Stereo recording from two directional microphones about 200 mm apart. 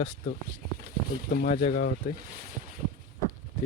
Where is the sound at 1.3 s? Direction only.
45° left (ahead or behind).